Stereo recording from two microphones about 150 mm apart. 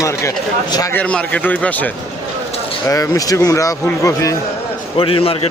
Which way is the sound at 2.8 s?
20° left (ahead or behind).